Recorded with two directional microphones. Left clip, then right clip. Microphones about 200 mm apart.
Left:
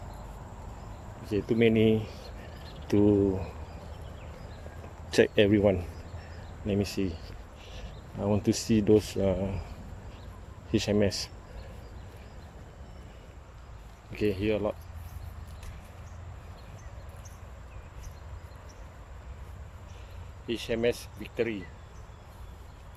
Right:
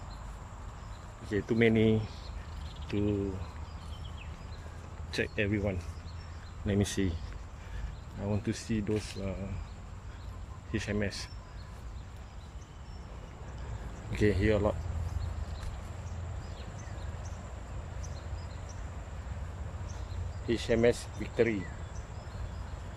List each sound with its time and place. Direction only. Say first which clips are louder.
1.3 s speech: left 3 dB; 10° left (ahead or behind)
2.8 s speech: left 9 dB; 30° left (ahead or behind)
5.1 s speech: left 10 dB; 25° left (ahead or behind)
6.7 s speech: left 2 dB; 5° left (ahead or behind)
8.2 s speech: left 8 dB; 20° left (ahead or behind)
10.7 s speech: left 8 dB; 20° left (ahead or behind)
14.1 s speech: even; 5° left (ahead or behind)
20.5 s speech: right 1 dB; centre (ahead or behind)